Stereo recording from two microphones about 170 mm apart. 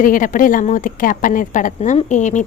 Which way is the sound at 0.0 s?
50° left (ahead or behind).